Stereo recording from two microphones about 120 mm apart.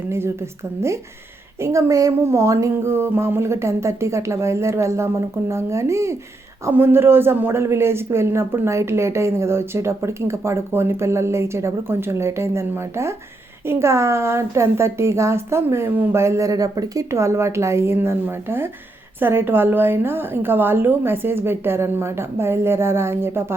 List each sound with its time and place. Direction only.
0.1 s a woman's voice: 20° right (ahead or behind)
1.6 s a woman's voice: 25° right (ahead or behind)